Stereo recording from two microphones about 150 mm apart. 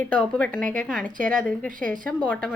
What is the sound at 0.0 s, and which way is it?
A woman's voice, 10° left (ahead or behind).